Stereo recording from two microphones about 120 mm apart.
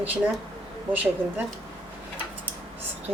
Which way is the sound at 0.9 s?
15° right (ahead or behind).